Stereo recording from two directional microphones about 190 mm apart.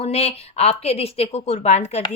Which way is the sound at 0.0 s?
35° left (ahead or behind).